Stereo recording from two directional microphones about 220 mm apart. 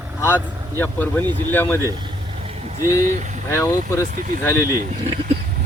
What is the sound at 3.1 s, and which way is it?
Speech, 35° right (ahead or behind).